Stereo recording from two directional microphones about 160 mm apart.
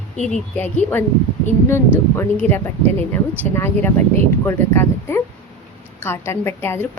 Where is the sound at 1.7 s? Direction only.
15° left (ahead or behind).